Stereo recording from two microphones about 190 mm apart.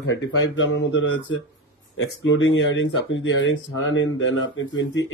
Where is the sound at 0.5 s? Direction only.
80° left.